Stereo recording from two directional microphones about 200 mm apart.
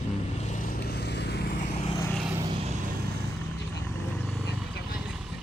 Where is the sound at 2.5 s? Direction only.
35° right (ahead or behind).